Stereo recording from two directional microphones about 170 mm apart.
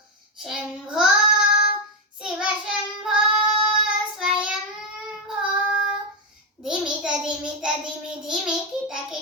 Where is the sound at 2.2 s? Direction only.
5° right (ahead or behind).